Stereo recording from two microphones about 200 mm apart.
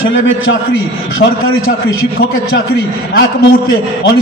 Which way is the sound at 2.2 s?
50° left (ahead or behind).